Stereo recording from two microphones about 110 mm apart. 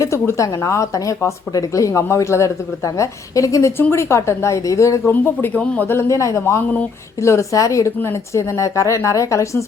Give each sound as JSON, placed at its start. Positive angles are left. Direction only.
{"t": 0.0, "sound": "speech", "side_deg": 30}